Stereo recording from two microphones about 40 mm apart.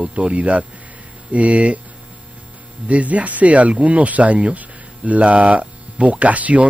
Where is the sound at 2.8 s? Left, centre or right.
Right.